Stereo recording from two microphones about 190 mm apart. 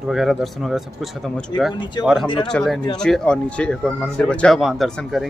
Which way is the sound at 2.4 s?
Centre (ahead or behind).